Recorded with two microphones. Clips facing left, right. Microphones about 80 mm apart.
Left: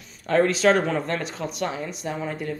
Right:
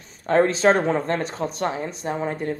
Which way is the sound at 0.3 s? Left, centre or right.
Right.